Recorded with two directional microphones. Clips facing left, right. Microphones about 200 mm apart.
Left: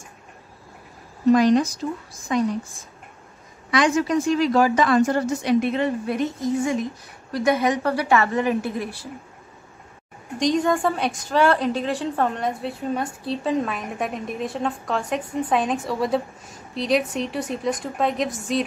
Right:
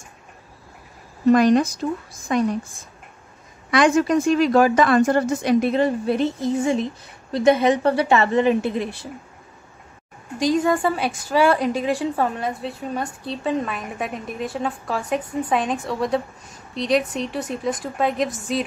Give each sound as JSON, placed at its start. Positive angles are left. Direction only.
{"t": 1.3, "sound": "speech", "side_deg": -55}
{"t": 3.7, "sound": "a woman's voice", "side_deg": -55}
{"t": 10.4, "sound": "a woman's voice", "side_deg": -5}